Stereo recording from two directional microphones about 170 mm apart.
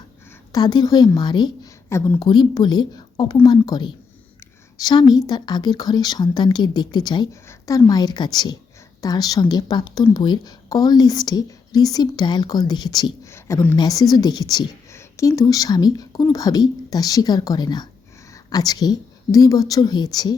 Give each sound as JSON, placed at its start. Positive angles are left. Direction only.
{"t": 0.5, "sound": "a woman's voice", "side_deg": 25}
{"t": 2.2, "sound": "speech", "side_deg": 25}